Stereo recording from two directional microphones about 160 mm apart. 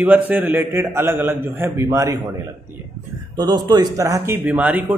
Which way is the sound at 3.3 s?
25° right (ahead or behind).